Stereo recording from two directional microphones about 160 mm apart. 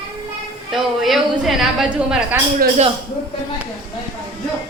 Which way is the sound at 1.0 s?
Centre (ahead or behind).